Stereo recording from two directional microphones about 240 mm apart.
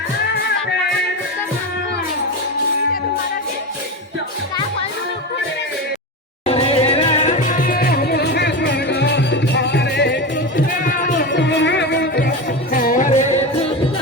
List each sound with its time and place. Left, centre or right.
6.4 s music: left
10.8 s music: left